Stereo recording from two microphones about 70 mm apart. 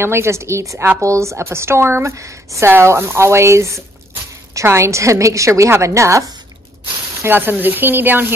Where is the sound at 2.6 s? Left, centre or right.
Right.